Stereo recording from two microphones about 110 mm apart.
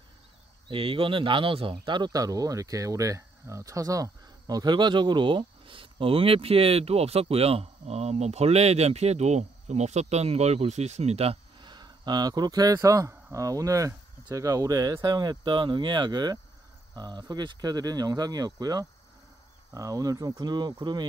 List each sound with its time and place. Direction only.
0.7 s speech: 55° right (ahead or behind); by 11.3 s 70° right (ahead or behind)
11.6 s speech: 40° right (ahead or behind)